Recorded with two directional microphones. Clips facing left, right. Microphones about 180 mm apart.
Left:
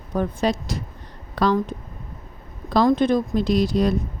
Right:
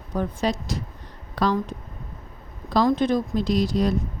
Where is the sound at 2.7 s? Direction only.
60° left (ahead or behind).